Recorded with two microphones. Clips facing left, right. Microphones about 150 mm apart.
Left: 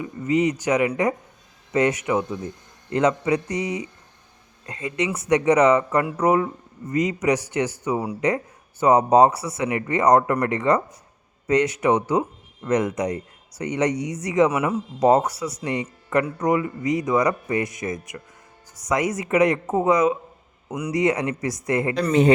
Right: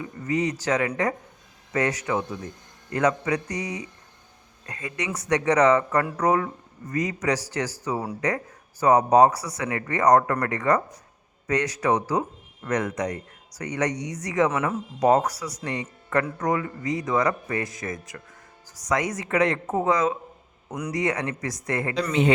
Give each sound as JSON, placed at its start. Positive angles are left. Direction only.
{"t": 0.0, "sound": "speech", "side_deg": 20}
{"t": 14.5, "sound": "speech", "side_deg": 10}
{"t": 15.0, "sound": "speech", "side_deg": 25}
{"t": 20.7, "sound": "a man's voice", "side_deg": 5}
{"t": 20.9, "sound": "speech", "side_deg": 20}